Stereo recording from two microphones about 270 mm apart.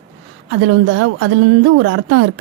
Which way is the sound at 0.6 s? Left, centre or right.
Right.